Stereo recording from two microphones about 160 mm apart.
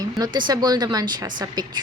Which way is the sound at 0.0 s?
25° right (ahead or behind).